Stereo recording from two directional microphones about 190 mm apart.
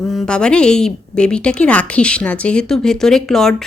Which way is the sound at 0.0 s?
Centre (ahead or behind).